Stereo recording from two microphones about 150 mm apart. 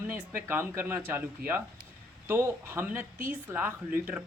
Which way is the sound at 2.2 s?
15° right (ahead or behind).